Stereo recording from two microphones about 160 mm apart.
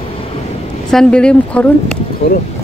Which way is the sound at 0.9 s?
5° left (ahead or behind).